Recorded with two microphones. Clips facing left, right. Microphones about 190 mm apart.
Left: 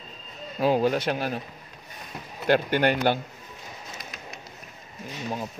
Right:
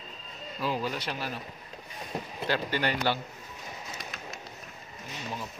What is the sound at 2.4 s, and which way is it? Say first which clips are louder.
Speech: left 8 dB; 55° left (ahead or behind).